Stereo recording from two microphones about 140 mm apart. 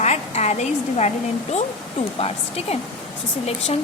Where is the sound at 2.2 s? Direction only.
45° left (ahead or behind).